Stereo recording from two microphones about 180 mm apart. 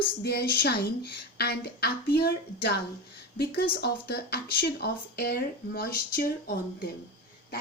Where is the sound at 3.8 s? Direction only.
60° left (ahead or behind).